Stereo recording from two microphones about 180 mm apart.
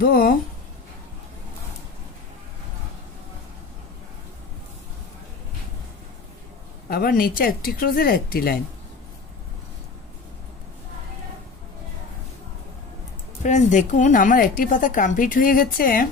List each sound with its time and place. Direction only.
0.0 s speech: 55° left (ahead or behind)
6.9 s a woman's voice: 55° left (ahead or behind)
13.4 s a woman's voice: 45° left (ahead or behind)